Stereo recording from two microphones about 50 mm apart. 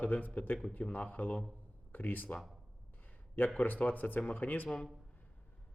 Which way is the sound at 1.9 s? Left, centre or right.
Left.